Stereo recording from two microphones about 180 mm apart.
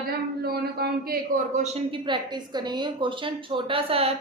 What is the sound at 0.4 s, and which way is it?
Speech, 60° right (ahead or behind).